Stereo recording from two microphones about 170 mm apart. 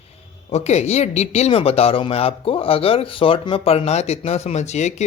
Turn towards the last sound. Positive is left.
turn(degrees=40)  # may be behind; listen again after turning